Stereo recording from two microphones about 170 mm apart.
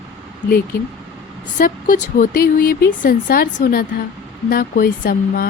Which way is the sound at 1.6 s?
50° left (ahead or behind).